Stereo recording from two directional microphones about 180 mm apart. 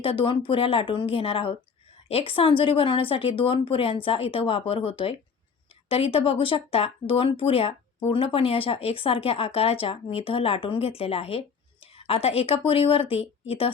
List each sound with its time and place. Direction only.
0.0 s speech: 30° left (ahead or behind)